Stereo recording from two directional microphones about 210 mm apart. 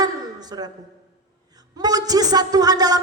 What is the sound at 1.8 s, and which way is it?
Speech, 15° right (ahead or behind).